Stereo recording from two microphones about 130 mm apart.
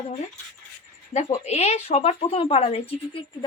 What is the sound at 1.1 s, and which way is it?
A woman's voice, 55° left (ahead or behind).